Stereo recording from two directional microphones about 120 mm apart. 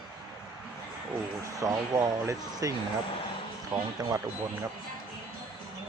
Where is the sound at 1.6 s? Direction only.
30° right (ahead or behind).